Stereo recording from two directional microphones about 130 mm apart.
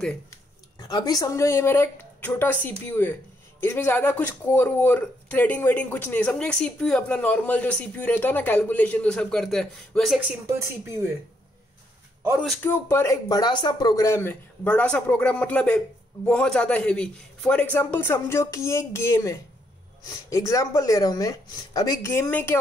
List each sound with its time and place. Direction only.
0.7 s speech: 30° left (ahead or behind); by 10.2 s centre (ahead or behind)
12.6 s speech: 15° left (ahead or behind)